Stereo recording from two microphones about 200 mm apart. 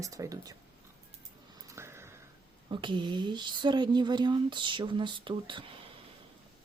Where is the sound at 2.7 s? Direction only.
25° right (ahead or behind).